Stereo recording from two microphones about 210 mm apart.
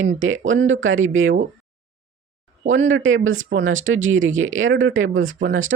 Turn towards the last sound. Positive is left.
turn(degrees=-65)  # may be behind; listen again after turning